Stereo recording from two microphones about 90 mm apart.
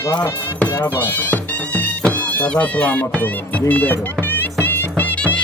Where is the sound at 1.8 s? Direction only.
15° left (ahead or behind).